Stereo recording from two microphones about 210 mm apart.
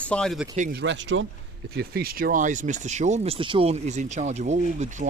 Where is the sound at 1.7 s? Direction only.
45° right (ahead or behind).